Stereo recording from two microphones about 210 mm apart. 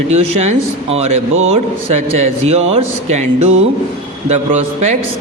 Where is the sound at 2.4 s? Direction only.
30° right (ahead or behind).